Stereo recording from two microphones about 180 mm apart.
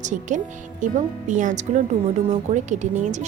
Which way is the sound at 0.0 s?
45° right (ahead or behind).